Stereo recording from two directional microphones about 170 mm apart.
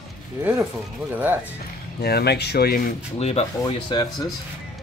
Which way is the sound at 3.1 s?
35° left (ahead or behind).